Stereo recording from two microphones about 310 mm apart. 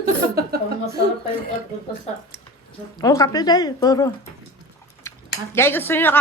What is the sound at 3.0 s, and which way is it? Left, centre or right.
Speech, centre.